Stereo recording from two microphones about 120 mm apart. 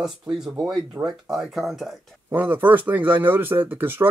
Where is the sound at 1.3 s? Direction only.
Centre (ahead or behind).